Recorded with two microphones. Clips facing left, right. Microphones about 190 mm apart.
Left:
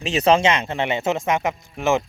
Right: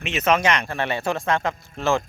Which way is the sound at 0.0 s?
35° left (ahead or behind).